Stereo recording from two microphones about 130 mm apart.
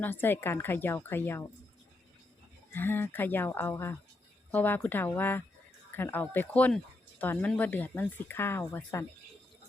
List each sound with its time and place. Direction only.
0.0 s speech: 15° left (ahead or behind)
2.7 s speech: 15° left (ahead or behind)